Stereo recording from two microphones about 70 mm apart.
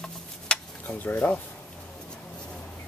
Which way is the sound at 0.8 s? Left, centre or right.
Left.